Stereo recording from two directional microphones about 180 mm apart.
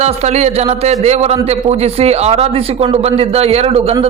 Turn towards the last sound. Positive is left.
turn(degrees=-35)  # may be behind; listen again after turning